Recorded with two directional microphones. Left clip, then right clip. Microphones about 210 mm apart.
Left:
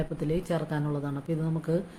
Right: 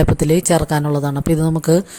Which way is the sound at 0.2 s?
50° right (ahead or behind).